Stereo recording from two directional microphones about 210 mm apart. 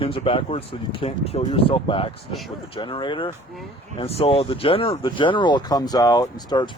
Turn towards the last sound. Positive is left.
turn(degrees=20)  # may be behind; listen again after turning